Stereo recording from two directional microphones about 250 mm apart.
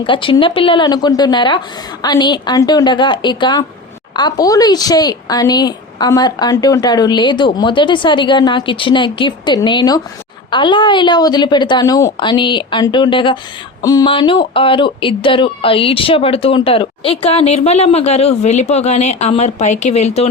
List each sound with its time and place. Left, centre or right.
0.0 s speech: left